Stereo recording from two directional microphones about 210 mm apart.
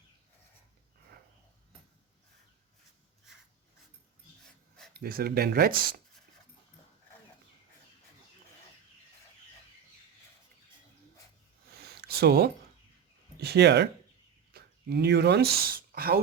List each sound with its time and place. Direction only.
4.9 s speech: 45° right (ahead or behind)
11.8 s a sound: 50° right (ahead or behind)
13.4 s speech: 50° right (ahead or behind)